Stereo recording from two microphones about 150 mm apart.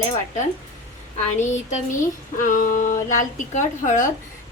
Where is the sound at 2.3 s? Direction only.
60° left (ahead or behind).